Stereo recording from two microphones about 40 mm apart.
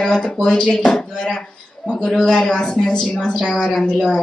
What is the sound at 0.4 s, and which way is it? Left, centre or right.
Speech, centre.